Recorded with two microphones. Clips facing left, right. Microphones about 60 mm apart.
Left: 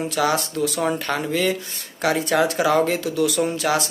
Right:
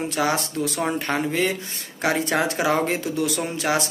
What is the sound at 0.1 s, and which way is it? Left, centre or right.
Speech, right.